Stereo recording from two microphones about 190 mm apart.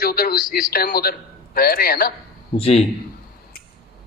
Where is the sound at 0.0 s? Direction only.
55° left (ahead or behind).